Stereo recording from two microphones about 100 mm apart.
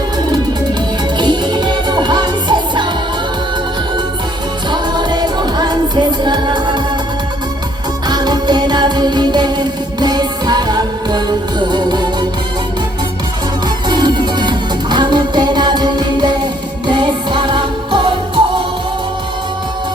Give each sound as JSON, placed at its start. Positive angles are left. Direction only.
{"t": 1.2, "sound": "music", "side_deg": -50}
{"t": 4.7, "sound": "music", "side_deg": -45}
{"t": 8.0, "sound": "music", "side_deg": -45}
{"t": 13.8, "sound": "music", "side_deg": -45}